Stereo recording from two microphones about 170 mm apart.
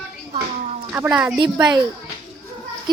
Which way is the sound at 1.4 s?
25° right (ahead or behind).